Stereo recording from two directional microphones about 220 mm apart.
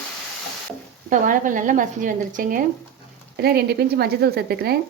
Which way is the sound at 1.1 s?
35° right (ahead or behind).